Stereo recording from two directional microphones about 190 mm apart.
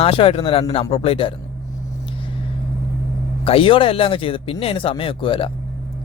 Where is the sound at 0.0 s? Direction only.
30° left (ahead or behind).